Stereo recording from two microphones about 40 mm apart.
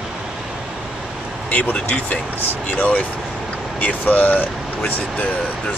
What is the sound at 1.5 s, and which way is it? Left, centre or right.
Speech, left.